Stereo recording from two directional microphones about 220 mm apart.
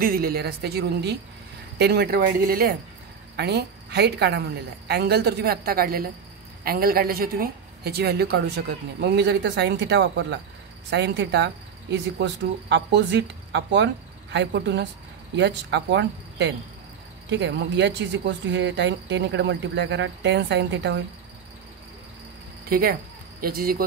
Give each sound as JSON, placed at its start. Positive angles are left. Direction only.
{"t": 0.0, "sound": "a woman's voice", "side_deg": -40}
{"t": 22.7, "sound": "a woman's voice", "side_deg": -45}